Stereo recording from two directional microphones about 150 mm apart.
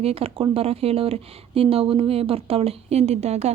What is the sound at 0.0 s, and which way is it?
Speech, 40° right (ahead or behind).